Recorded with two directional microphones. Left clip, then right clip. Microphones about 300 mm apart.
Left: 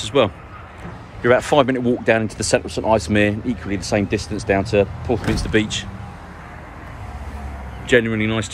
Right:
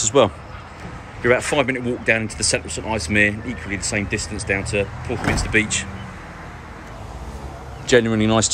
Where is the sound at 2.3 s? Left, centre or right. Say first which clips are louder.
Right 1 dB; left.